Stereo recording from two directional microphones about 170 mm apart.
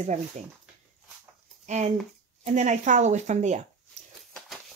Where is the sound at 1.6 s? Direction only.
40° right (ahead or behind).